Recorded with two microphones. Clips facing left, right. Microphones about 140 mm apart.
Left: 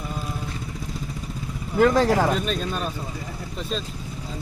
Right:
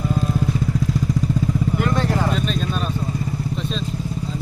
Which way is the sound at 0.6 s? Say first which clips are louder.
Right 11 dB; 85° right.